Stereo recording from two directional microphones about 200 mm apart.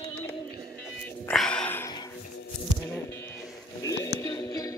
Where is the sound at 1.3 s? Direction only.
5° left (ahead or behind).